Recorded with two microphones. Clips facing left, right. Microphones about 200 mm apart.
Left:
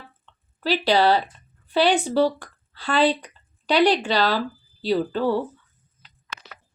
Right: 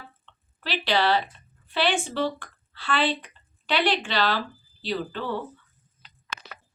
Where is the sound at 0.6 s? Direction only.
40° left (ahead or behind).